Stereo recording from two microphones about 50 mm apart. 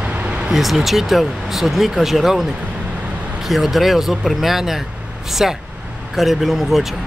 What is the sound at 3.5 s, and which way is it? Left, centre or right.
Speech, centre.